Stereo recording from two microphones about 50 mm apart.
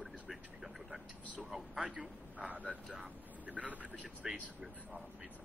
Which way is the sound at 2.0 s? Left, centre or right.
Right.